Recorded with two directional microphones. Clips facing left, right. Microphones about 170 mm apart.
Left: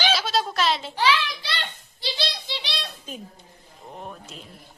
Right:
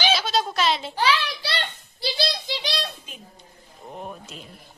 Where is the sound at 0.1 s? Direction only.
Centre (ahead or behind).